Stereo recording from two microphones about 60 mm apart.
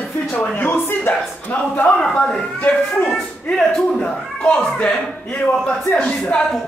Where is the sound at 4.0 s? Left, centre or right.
Centre.